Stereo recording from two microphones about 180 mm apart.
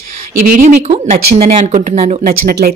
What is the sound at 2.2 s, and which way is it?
Speech, 55° right (ahead or behind).